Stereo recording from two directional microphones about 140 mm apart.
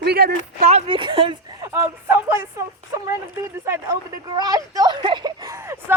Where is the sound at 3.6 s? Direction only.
20° right (ahead or behind).